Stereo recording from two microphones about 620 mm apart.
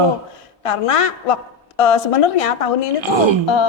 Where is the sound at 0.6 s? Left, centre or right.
Left.